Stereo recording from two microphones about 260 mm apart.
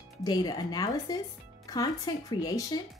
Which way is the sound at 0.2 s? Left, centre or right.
Centre.